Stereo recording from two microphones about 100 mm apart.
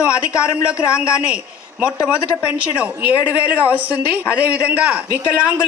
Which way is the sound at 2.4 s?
10° right (ahead or behind).